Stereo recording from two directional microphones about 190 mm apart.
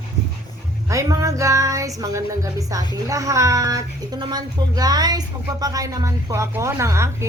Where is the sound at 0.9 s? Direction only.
20° right (ahead or behind).